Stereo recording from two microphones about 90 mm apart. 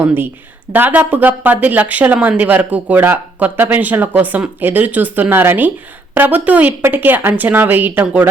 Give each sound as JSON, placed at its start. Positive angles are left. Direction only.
{"t": 0.0, "sound": "speech", "side_deg": -25}